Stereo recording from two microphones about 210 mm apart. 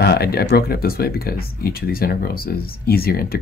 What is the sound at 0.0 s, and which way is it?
Speech, 50° left (ahead or behind).